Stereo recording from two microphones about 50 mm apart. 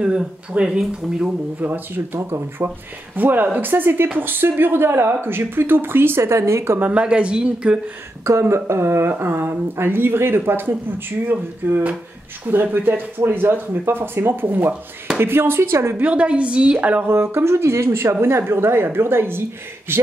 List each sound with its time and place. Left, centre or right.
0.0 s speech: right
1.6 s speech: right
2.1 s speech: right
3.2 s speech: right
6.2 s speech: right
6.8 s speech: right
8.2 s speech: right
16.1 s speech: right
16.7 s speech: right
17.1 s speech: right
18.4 s speech: right